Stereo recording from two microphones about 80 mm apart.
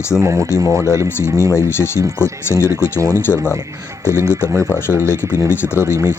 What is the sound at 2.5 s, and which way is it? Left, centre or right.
Speech, left.